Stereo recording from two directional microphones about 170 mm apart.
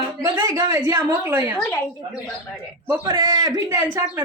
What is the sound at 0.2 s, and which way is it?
A woman's voice, 20° right (ahead or behind).